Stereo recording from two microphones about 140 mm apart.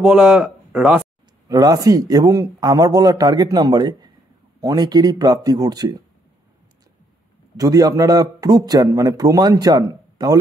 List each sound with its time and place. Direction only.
0.0 s speech: 5° right (ahead or behind)
1.5 s a man's voice: 25° right (ahead or behind)
7.5 s a man's voice: 25° right (ahead or behind)